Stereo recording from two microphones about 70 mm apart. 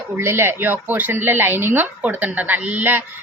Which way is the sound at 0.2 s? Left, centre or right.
Right.